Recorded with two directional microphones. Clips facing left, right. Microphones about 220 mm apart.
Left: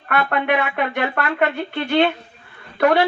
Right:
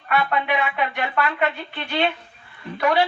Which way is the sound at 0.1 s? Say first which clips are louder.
Left 3 dB; 55° left (ahead or behind).